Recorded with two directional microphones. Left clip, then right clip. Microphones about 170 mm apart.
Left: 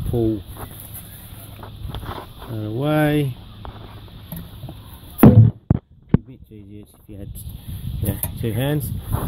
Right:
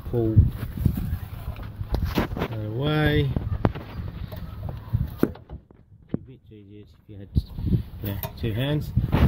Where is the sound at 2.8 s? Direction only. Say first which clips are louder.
Left 5 dB; 40° left (ahead or behind).